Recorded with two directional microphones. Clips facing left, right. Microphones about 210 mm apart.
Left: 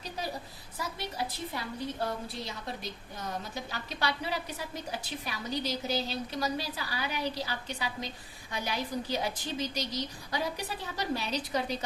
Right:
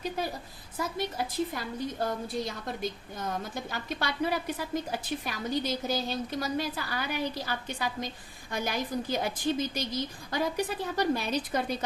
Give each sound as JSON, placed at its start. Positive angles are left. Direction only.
{"t": 0.8, "sound": "a woman's voice", "side_deg": -50}